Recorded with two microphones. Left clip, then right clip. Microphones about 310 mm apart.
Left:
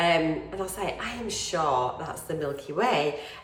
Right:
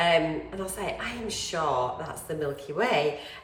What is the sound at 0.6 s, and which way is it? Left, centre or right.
A woman's voice, centre.